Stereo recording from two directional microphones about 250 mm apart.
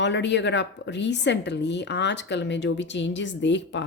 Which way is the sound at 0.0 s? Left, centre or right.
Left.